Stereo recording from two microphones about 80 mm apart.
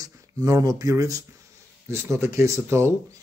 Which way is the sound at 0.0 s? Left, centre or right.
Right.